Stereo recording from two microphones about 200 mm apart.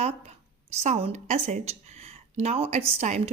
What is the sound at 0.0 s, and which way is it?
A woman's voice, 30° right (ahead or behind).